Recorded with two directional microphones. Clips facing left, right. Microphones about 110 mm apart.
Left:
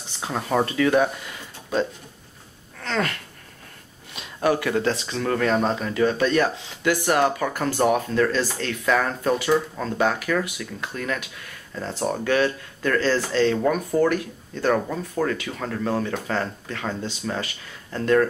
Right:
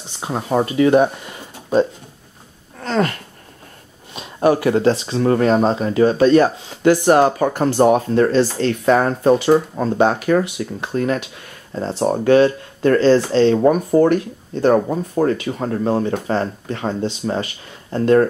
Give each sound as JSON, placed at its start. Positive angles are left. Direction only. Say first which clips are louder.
{"t": 0.2, "sound": "speech", "louder": "right 4 dB", "side_deg": -20}
{"t": 2.8, "sound": "a sound", "louder": "right 6 dB", "side_deg": -35}
{"t": 4.1, "sound": "speech", "louder": "right 6 dB", "side_deg": -35}